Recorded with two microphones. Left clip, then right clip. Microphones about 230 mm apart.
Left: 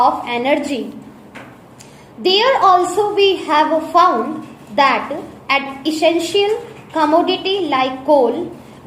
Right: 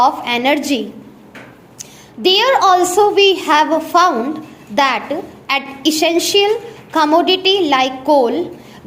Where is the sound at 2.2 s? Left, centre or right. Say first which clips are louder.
Right 1 dB; right.